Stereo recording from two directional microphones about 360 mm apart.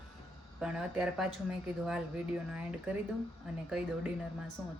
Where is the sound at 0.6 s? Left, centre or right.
Centre.